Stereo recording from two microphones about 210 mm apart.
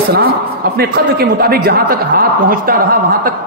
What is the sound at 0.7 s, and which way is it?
Speech, 45° right (ahead or behind).